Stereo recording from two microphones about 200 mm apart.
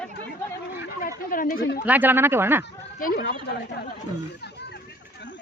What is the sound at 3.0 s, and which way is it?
Speech, 50° left (ahead or behind).